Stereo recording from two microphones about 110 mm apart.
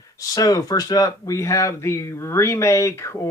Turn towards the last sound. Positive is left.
turn(degrees=25)  # may be behind; listen again after turning